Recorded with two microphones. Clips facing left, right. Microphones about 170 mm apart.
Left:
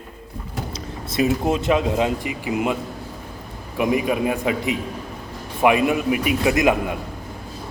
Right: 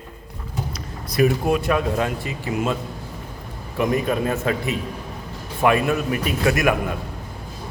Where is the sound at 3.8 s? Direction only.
10° left (ahead or behind).